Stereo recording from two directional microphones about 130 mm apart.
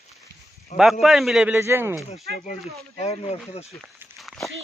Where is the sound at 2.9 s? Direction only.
55° left (ahead or behind).